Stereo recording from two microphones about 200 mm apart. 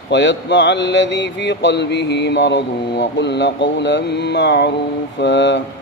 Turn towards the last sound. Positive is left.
turn(degrees=60)  # may be behind; listen again after turning